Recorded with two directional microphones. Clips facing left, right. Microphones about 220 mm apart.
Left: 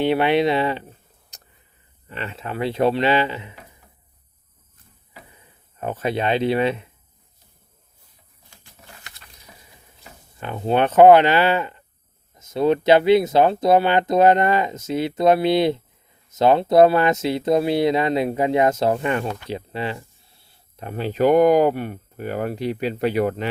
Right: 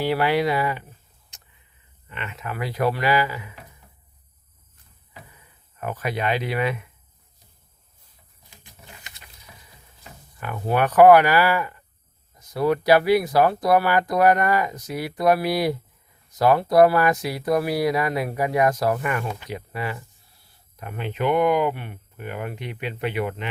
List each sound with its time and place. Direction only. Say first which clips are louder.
0.0 s speech: left 3 dB; 20° left (ahead or behind)
1.3 s a sound: left 4 dB; 40° left (ahead or behind)
2.0 s speech: left 3 dB; 35° left (ahead or behind)
5.8 s speech: left 3 dB; 25° left (ahead or behind)
8.4 s a sound: even; 20° right (ahead or behind)
10.3 s speech: left 3 dB; 25° left (ahead or behind)